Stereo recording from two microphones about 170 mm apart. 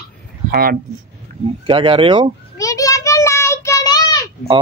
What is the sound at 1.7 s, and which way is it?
Speech, 30° right (ahead or behind).